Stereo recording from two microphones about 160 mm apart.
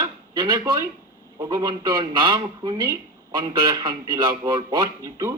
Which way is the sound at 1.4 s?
25° right (ahead or behind).